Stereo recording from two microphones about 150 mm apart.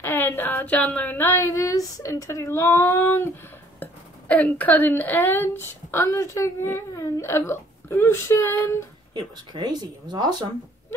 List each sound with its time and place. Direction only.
0.0 s a woman's voice: 15° left (ahead or behind)
3.8 s a sound: 10° left (ahead or behind)
4.5 s a woman's voice: 10° left (ahead or behind)
9.1 s speech: 30° right (ahead or behind)